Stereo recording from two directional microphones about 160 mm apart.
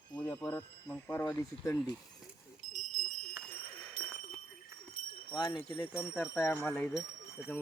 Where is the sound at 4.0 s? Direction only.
60° left (ahead or behind).